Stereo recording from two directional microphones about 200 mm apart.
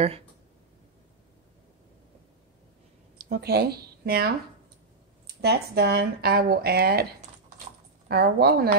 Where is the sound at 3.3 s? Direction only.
50° right (ahead or behind).